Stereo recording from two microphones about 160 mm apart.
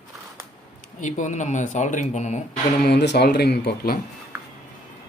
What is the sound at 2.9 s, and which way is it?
Speech, 90° left.